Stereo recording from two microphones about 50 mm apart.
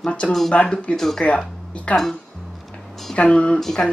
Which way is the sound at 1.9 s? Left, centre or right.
Left.